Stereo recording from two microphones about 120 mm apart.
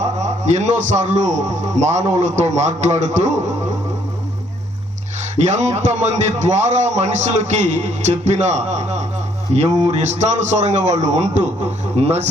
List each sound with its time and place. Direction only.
0.0 s a man's voice: 75° right (ahead or behind)
5.5 s a man's voice: 70° right (ahead or behind)